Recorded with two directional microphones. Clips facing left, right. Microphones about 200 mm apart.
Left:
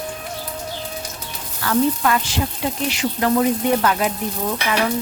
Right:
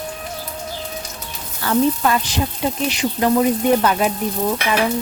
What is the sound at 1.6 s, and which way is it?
Speech, 25° right (ahead or behind).